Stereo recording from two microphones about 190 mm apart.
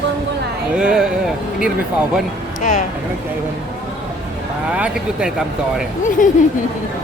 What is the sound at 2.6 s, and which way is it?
Speech, 40° left (ahead or behind).